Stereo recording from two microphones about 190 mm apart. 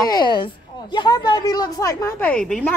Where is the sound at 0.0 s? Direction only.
20° left (ahead or behind).